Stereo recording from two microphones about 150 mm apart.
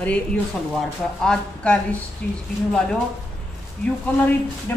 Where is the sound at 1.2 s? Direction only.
5° left (ahead or behind).